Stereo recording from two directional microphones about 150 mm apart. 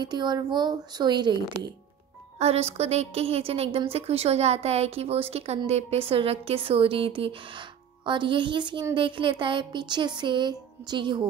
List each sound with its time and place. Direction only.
0.0 s speech: 30° right (ahead or behind)
2.3 s a woman's voice: 45° right (ahead or behind)